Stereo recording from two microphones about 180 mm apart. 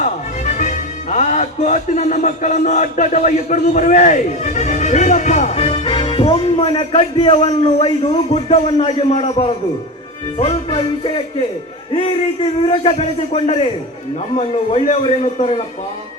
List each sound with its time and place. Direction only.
0.0 s speech: 40° left (ahead or behind)
10.3 s music: 30° left (ahead or behind)
11.9 s a man's voice: 30° left (ahead or behind)